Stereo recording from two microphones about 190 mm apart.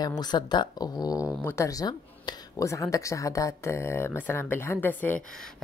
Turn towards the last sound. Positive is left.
turn(degrees=10)  # may be behind; listen again after turning